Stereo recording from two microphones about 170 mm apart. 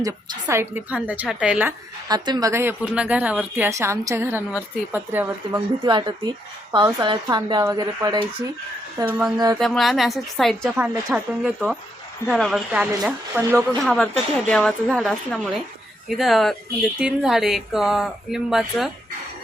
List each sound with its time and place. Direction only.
0.0 s a woman's voice: 15° right (ahead or behind)
2.0 s a woman's voice: 25° right (ahead or behind)
5.8 s speech: 25° right (ahead or behind)
9.0 s a woman's voice: 10° right (ahead or behind)
9.6 s speech: centre (ahead or behind)
13.6 s speech: 5° left (ahead or behind)